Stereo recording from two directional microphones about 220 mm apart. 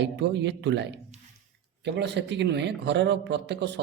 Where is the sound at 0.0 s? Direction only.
50° right (ahead or behind).